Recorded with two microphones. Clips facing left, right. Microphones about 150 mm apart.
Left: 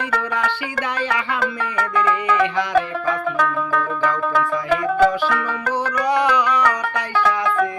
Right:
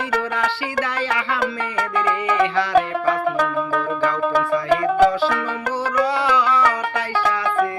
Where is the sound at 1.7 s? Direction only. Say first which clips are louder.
Left 4 dB; 25° right (ahead or behind).